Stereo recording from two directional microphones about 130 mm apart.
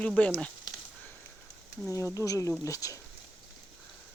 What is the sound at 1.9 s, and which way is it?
Speech, 25° left (ahead or behind).